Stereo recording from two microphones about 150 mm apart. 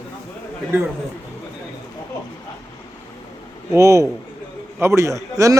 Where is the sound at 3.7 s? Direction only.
20° right (ahead or behind).